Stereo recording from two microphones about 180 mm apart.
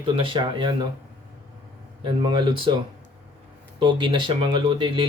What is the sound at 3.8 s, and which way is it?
Speech, 25° right (ahead or behind).